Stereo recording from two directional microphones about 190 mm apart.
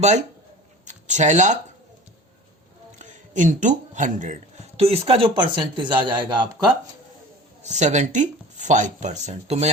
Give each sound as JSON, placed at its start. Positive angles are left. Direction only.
{"t": 0.0, "sound": "speech", "side_deg": -35}
{"t": 3.0, "sound": "speech", "side_deg": -40}
{"t": 7.6, "sound": "speech", "side_deg": -35}